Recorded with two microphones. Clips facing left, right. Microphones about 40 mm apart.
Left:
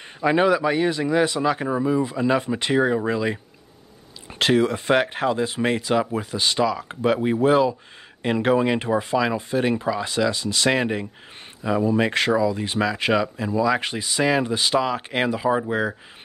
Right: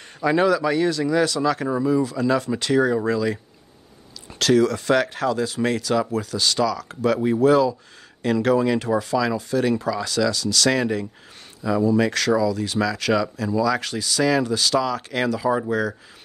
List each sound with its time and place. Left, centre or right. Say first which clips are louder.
0.2 s speech: even; left
4.4 s speech: right 1 dB; left